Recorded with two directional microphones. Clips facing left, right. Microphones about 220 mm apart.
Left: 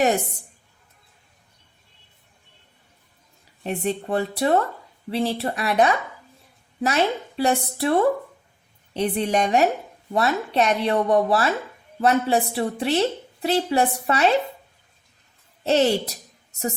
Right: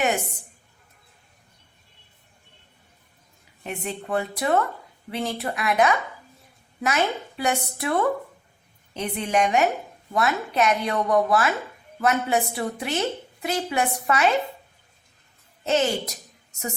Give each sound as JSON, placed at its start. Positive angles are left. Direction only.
{"t": 3.6, "sound": "a woman's voice", "side_deg": 35}
{"t": 15.6, "sound": "a woman's voice", "side_deg": 35}